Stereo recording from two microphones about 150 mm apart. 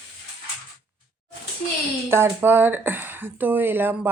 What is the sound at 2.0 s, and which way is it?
Speech, 15° right (ahead or behind).